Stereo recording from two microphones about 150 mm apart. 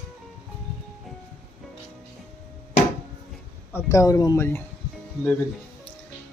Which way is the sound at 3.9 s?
20° left (ahead or behind).